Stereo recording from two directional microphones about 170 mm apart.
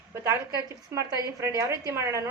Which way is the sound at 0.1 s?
15° right (ahead or behind).